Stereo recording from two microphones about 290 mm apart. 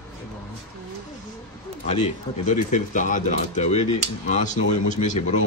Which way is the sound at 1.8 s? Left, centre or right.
Left.